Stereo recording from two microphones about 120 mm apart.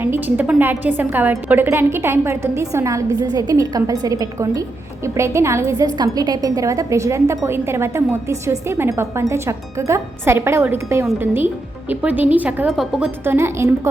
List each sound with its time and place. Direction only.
0.0 s a woman's voice: 15° right (ahead or behind)
13.2 s speech: 20° right (ahead or behind)